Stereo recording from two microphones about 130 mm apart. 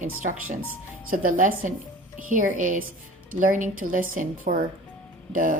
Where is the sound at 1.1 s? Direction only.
85° right.